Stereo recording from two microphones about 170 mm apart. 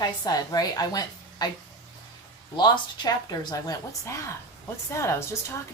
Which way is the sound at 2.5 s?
25° left (ahead or behind).